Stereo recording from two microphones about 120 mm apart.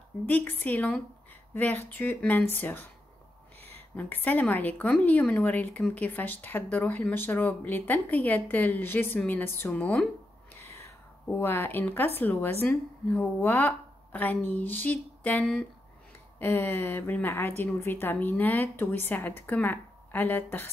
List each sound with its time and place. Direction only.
0.3 s a woman's voice: 15° left (ahead or behind)
3.9 s a woman's voice: 15° left (ahead or behind)
10.8 s a woman's voice: 20° left (ahead or behind)